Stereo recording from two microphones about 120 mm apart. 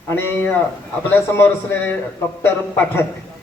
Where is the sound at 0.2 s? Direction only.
20° left (ahead or behind).